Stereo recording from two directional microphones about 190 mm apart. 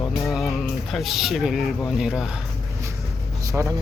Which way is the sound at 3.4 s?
15° right (ahead or behind).